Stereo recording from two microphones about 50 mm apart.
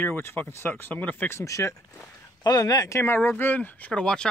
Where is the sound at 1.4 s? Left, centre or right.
Left.